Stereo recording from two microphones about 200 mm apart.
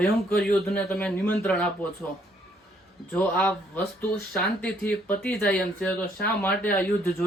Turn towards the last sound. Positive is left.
turn(degrees=5)  # may be behind; listen again after turning